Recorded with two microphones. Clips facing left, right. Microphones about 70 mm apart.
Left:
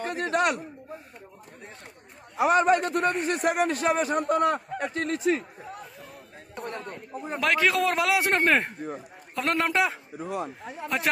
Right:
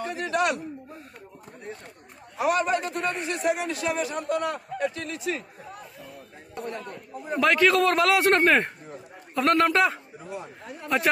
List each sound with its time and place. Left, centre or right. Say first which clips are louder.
0.0 s a sound: even; left
2.3 s speech: left 3 dB; left
2.6 s a man's voice: left 4 dB; left
6.6 s speech: right 1 dB; left
7.3 s a man's voice: right 3 dB; centre
10.2 s speech: left 6 dB; left